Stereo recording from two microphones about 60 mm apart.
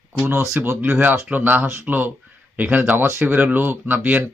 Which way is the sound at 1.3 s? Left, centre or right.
Right.